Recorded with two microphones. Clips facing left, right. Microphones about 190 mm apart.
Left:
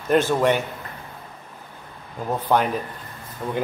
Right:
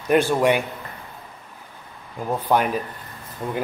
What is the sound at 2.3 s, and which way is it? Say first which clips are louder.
Speech: even; 10° right (ahead or behind).